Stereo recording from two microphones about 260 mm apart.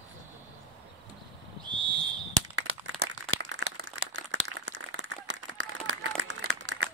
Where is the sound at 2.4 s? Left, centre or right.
Right.